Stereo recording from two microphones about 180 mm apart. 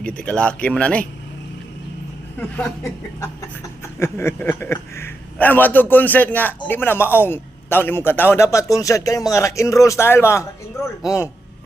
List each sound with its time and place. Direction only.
0.0 s a man's voice: 5° left (ahead or behind)
2.4 s a man's voice: 10° left (ahead or behind)